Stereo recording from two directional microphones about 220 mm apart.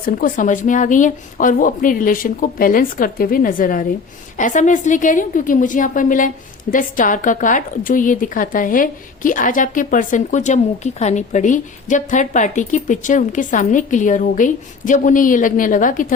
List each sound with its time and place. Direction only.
0.0 s a woman's voice: 40° left (ahead or behind)